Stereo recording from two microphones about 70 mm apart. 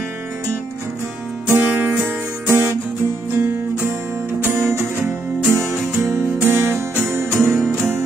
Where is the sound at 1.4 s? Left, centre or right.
Right.